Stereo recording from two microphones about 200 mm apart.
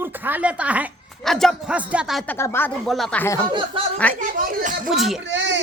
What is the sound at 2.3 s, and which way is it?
Speech, 10° left (ahead or behind).